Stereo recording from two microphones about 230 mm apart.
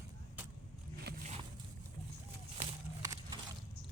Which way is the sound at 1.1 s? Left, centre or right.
Right.